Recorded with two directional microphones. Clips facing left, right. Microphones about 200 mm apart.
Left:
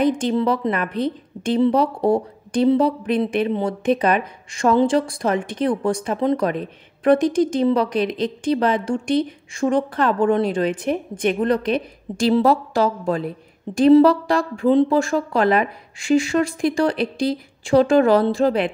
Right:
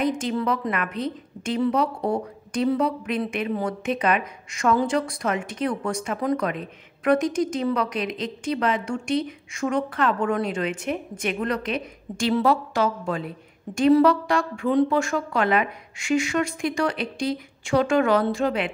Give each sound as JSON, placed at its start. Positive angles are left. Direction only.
{"t": 0.0, "sound": "a woman's voice", "side_deg": 30}